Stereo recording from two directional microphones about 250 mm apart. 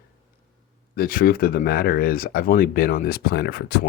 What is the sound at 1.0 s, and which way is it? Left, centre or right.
Speech, left.